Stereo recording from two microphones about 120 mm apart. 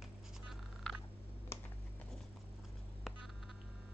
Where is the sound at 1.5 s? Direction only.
20° left (ahead or behind).